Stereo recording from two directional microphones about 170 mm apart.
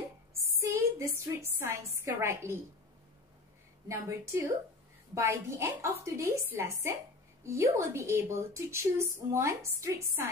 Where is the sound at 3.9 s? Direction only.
15° right (ahead or behind).